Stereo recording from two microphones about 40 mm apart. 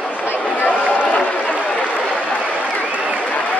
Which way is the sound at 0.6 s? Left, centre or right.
Left.